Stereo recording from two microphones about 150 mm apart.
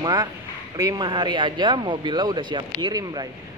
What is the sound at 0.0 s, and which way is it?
A woman's voice, 25° right (ahead or behind).